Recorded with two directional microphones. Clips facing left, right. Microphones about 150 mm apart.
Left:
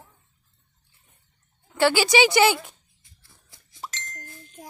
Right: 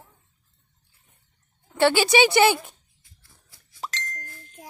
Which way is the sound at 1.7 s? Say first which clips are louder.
Right 1 dB; 20° right (ahead or behind).